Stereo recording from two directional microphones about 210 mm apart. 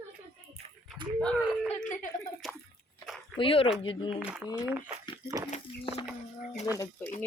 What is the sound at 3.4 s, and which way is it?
Speech, 25° left (ahead or behind).